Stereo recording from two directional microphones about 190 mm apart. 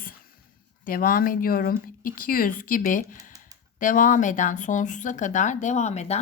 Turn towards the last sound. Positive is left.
turn(degrees=35)  # may be behind; listen again after turning